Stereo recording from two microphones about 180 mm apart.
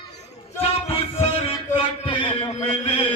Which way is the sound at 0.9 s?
35° left (ahead or behind).